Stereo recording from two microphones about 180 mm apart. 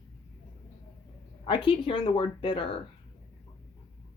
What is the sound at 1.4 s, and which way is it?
Speech, 30° left (ahead or behind).